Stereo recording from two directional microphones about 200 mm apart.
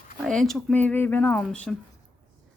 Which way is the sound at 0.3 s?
Centre (ahead or behind).